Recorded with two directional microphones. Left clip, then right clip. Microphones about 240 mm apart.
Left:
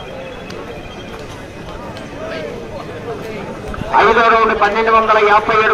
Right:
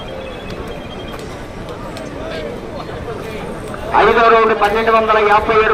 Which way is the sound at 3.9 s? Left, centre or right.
Left.